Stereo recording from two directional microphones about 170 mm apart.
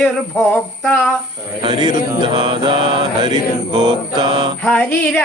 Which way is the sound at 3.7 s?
25° right (ahead or behind).